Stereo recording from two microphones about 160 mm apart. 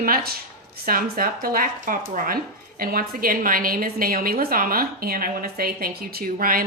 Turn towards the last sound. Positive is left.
turn(degrees=-65)  # may be behind; listen again after turning